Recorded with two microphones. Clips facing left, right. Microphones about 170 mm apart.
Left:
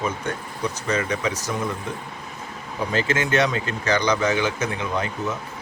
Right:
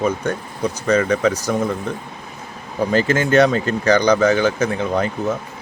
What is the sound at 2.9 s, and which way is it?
Speech, 40° right (ahead or behind).